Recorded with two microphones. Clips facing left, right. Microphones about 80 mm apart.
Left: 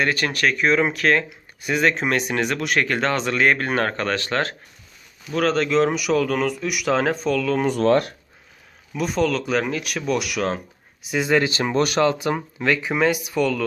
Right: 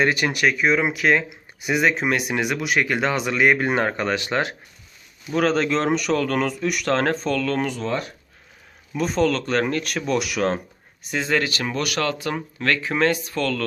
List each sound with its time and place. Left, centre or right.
0.0 s speech: centre
5.3 s speech: centre
7.7 s speech: left
8.9 s speech: centre